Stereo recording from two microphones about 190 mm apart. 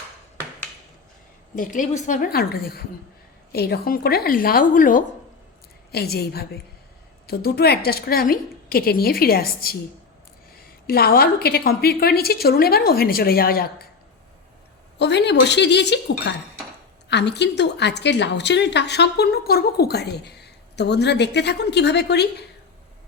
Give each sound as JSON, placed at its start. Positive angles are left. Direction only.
{"t": 1.5, "sound": "a woman's voice", "side_deg": 45}
{"t": 5.9, "sound": "a woman's voice", "side_deg": 55}
{"t": 14.9, "sound": "a woman's voice", "side_deg": 65}